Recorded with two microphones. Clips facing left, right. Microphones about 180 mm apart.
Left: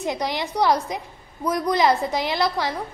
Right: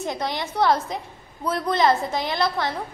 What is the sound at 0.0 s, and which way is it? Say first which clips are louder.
A child's voice: left 2 dB; 20° left (ahead or behind).